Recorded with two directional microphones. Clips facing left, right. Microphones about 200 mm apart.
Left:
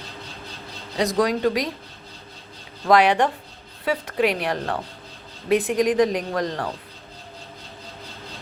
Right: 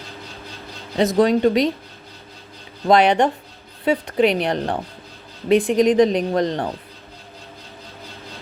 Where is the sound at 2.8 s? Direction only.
20° right (ahead or behind).